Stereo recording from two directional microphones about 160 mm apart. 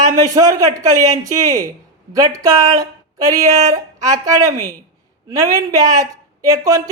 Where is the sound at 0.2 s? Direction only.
20° right (ahead or behind).